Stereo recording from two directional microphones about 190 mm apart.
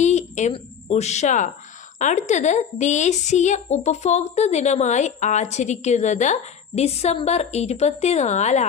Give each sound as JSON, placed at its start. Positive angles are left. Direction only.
{"t": 0.0, "sound": "a woman's voice", "side_deg": 40}